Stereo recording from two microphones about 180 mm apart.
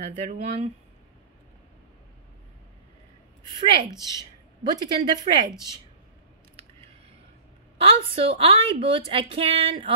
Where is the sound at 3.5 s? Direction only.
30° right (ahead or behind).